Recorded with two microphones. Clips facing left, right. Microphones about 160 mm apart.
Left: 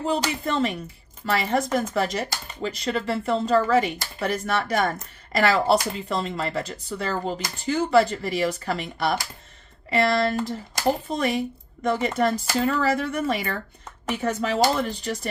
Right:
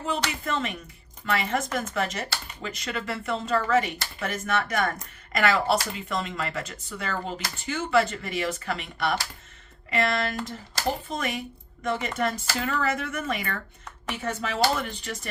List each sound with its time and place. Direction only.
0.0 s speech: 35° left (ahead or behind)